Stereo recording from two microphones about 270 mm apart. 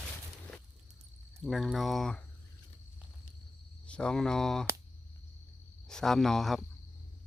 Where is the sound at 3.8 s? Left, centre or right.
Centre.